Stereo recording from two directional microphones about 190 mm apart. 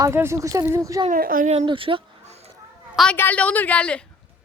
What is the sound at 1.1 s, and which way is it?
Speech, 45° right (ahead or behind).